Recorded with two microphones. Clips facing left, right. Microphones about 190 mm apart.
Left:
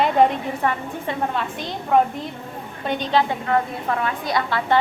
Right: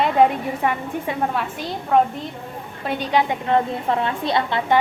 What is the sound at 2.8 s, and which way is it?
A woman's voice, 10° right (ahead or behind).